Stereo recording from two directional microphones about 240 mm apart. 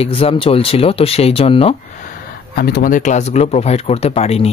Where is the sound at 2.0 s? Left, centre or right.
Left.